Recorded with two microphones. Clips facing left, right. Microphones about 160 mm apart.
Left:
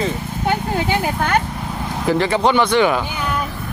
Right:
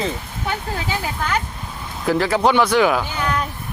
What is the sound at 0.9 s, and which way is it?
Speech, 60° left (ahead or behind).